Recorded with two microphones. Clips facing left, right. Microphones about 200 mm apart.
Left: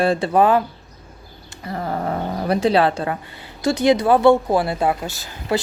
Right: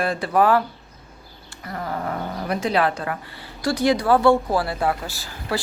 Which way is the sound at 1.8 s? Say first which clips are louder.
Left 4 dB; 35° left (ahead or behind).